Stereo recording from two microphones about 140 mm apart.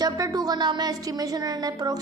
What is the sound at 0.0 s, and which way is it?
Speech, 30° right (ahead or behind).